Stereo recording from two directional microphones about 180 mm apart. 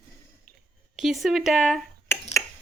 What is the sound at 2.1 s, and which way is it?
Finger snapping, 15° left (ahead or behind).